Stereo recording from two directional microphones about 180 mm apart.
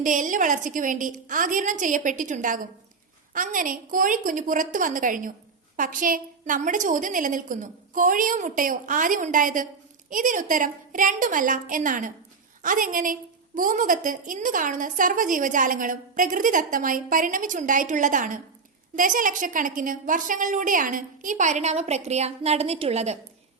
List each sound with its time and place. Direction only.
0.0 s a woman's voice: 45° right (ahead or behind)